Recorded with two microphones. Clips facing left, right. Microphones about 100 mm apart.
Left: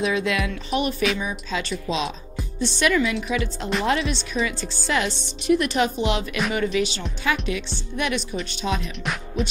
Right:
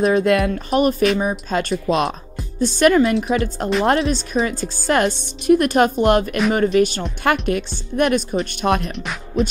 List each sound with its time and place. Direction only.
0.0 s speech: 45° right (ahead or behind)